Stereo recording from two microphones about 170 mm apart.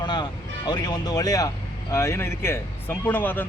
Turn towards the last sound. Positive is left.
turn(degrees=10)  # may be behind; listen again after turning